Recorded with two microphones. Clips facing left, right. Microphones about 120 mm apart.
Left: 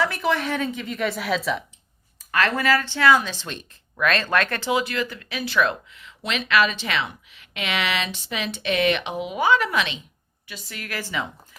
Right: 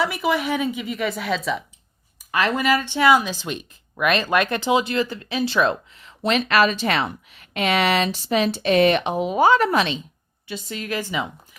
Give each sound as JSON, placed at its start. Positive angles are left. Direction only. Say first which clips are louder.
{"t": 0.0, "sound": "a woman's voice", "louder": "right 1 dB", "side_deg": -10}
{"t": 2.1, "sound": "speech", "louder": "right 1 dB", "side_deg": -15}
{"t": 10.4, "sound": "a woman's voice", "louder": "right 7 dB", "side_deg": -25}